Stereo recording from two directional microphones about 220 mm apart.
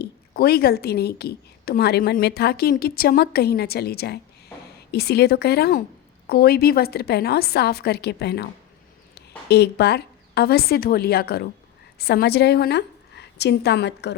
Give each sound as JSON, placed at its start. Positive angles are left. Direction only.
{"t": 0.0, "sound": "a woman's voice", "side_deg": 45}